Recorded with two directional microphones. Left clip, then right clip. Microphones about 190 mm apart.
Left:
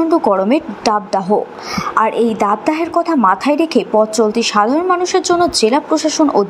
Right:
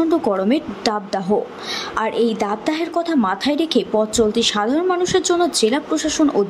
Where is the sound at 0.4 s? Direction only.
20° right (ahead or behind).